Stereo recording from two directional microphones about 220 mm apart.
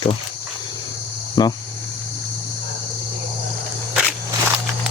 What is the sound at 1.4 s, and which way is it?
Speech, 20° left (ahead or behind).